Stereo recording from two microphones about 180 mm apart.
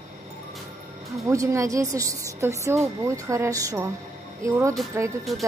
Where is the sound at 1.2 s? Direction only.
15° right (ahead or behind).